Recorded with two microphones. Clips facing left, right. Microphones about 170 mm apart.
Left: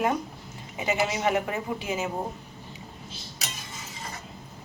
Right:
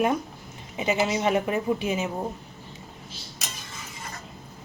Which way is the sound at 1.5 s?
20° right (ahead or behind).